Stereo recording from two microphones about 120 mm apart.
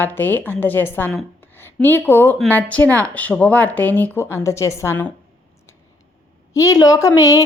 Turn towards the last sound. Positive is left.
turn(degrees=25)  # may be behind; listen again after turning